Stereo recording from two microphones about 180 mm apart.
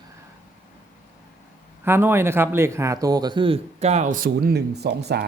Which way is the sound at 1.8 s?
10° right (ahead or behind).